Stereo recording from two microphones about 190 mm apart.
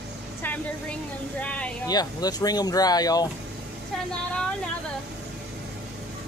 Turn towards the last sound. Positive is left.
turn(degrees=5)  # may be behind; listen again after turning